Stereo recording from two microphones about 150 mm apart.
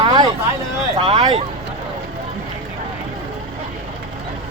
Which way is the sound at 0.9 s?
40° right (ahead or behind).